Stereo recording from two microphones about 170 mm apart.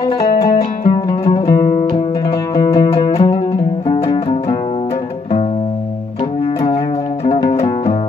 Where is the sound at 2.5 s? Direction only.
20° left (ahead or behind).